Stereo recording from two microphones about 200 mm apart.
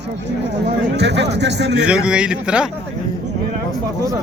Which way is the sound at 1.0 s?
60° right (ahead or behind).